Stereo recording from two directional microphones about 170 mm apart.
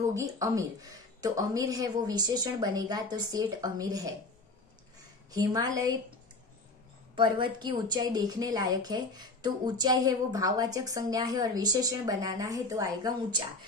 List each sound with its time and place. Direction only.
0.1 s a woman's voice: 20° right (ahead or behind)
5.3 s a woman's voice: 20° right (ahead or behind)
7.2 s a woman's voice: 30° right (ahead or behind)